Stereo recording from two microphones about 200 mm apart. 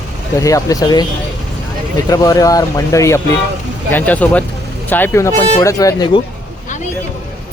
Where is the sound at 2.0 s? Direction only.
20° left (ahead or behind).